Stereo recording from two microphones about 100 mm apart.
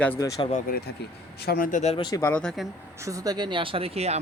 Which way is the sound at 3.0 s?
40° right (ahead or behind).